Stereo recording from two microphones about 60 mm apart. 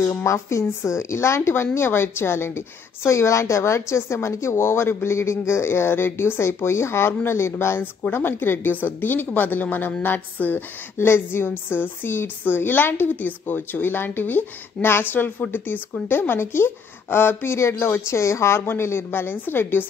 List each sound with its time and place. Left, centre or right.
0.1 s speech: left
7.8 s a woman's voice: left